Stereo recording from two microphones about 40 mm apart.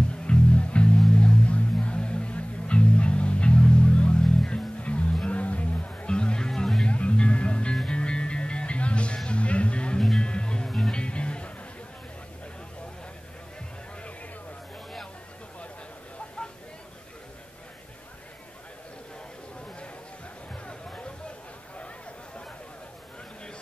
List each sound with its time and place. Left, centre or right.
0.3 s music: left
6.0 s music: left
6.9 s music: left
20.6 s a sound: left